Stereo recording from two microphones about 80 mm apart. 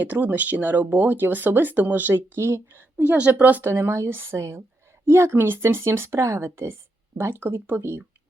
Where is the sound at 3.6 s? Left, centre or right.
Right.